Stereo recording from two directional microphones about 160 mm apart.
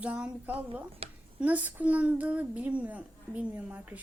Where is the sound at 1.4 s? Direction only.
10° right (ahead or behind).